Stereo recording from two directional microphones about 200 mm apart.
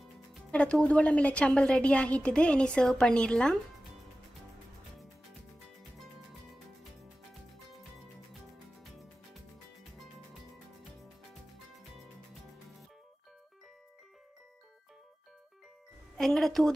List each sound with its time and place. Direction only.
0.0 s a woman's voice: 5° left (ahead or behind)
8.8 s music: centre (ahead or behind)
16.2 s music: centre (ahead or behind)